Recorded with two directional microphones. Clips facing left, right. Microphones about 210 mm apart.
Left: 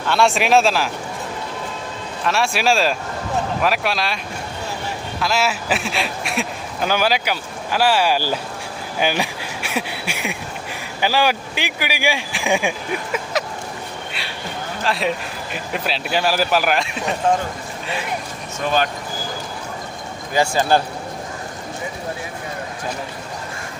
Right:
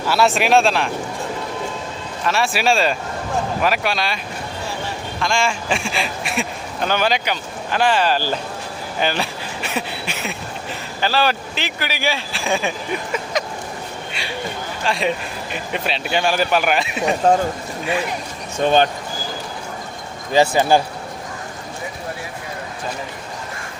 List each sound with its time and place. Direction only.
0.0 s speech: 5° right (ahead or behind)
2.2 s speech: centre (ahead or behind)
5.2 s speech: 5° left (ahead or behind)
14.1 s a sound: centre (ahead or behind)
14.8 s speech: centre (ahead or behind)
17.2 s speech: 40° right (ahead or behind)
18.6 s speech: 30° right (ahead or behind)
20.3 s a man's voice: 20° right (ahead or behind)